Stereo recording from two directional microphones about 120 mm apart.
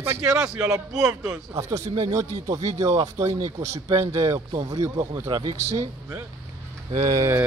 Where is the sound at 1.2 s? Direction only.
25° right (ahead or behind).